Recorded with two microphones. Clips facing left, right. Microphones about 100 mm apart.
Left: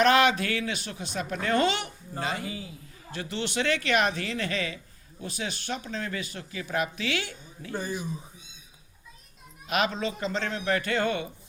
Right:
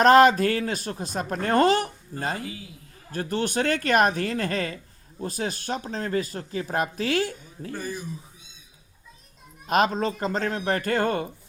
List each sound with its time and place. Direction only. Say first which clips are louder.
0.0 s speech: right 6 dB; 40° right (ahead or behind)
7.7 s speech: even; 20° left (ahead or behind)
9.6 s speech: right 5 dB; 40° right (ahead or behind)